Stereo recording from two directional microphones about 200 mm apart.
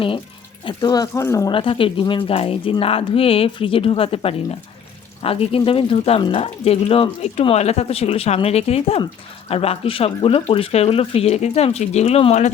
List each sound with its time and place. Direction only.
0.6 s speech: 20° left (ahead or behind)
1.5 s speech: 25° left (ahead or behind)